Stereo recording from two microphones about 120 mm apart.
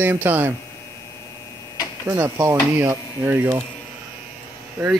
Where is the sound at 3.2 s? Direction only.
20° right (ahead or behind).